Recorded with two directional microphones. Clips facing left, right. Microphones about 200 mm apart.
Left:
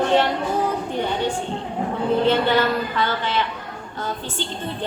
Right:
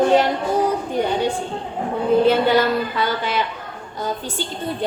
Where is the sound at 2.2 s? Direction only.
10° right (ahead or behind).